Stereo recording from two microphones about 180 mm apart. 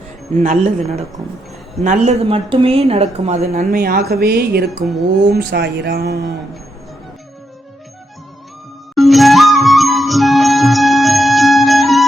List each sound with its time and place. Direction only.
0.3 s speech: 45° right (ahead or behind); by 6.1 s 65° right (ahead or behind)
9.0 s music: centre (ahead or behind)